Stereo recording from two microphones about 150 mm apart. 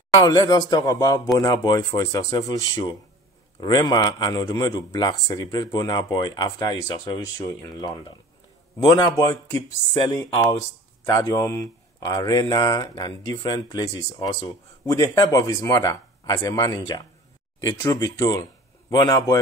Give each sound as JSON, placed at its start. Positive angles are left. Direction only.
{"t": 0.2, "sound": "speech", "side_deg": 25}